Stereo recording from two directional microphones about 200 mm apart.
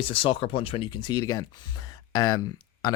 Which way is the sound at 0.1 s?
25° left (ahead or behind).